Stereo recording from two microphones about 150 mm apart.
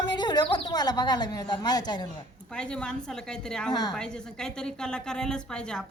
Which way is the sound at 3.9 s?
5° left (ahead or behind).